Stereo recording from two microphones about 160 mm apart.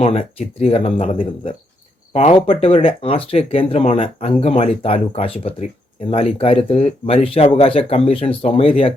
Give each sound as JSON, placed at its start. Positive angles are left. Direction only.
{"t": 0.0, "sound": "speech", "side_deg": 40}